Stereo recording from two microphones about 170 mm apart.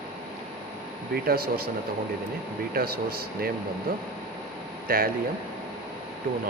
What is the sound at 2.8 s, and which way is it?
Speech, 65° right (ahead or behind).